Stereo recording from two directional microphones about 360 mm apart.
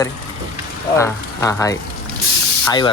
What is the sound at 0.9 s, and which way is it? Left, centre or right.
Speech, centre.